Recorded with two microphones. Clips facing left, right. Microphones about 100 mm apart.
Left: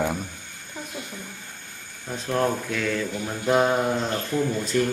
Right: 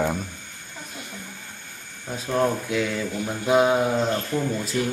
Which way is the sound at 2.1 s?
5° right (ahead or behind).